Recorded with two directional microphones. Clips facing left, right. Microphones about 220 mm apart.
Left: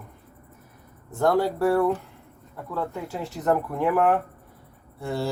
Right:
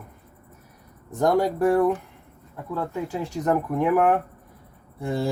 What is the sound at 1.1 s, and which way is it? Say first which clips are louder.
Speech: right 1 dB; 15° right (ahead or behind).